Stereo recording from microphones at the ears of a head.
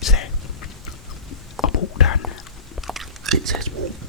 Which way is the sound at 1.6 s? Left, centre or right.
Left.